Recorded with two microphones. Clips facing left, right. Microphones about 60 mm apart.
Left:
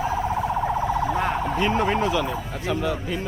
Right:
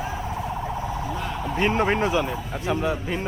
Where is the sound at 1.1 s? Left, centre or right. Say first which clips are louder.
Left 6 dB; left.